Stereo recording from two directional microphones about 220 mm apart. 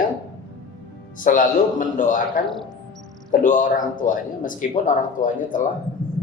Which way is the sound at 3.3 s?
35° left (ahead or behind).